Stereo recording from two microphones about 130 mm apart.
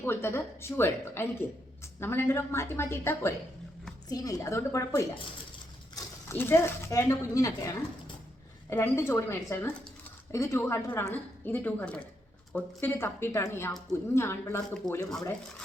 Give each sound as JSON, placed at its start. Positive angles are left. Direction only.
{"t": 0.0, "sound": "speech", "side_deg": 20}
{"t": 6.2, "sound": "speech", "side_deg": 20}
{"t": 8.7, "sound": "a woman's voice", "side_deg": 20}